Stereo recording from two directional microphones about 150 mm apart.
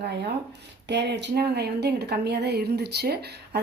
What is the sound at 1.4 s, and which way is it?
A woman's voice, 90° right.